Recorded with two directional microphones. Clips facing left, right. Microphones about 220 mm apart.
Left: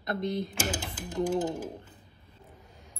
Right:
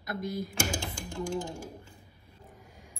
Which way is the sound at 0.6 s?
20° left (ahead or behind).